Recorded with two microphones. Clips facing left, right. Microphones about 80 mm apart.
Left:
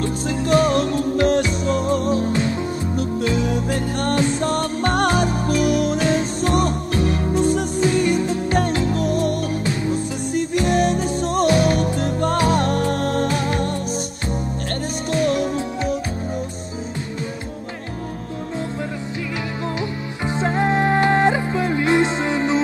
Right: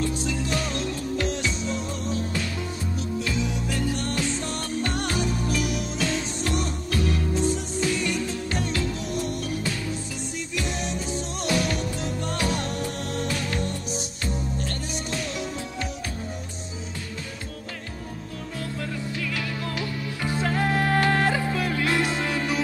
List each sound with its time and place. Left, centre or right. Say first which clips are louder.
0.0 s music: left 5 dB; left
3.3 s music: left 6 dB; left
6.0 s music: left 8 dB; left
7.3 s music: left 8 dB; left
7.8 s music: left 8 dB; left
10.7 s music: left 11 dB; left
11.5 s music: left 8 dB; left
11.8 s music: left 9 dB; left
13.3 s music: left 7 dB; left
13.6 s music: left 7 dB; left
15.2 s music: left 12 dB; left
19.8 s music: left 4 dB; left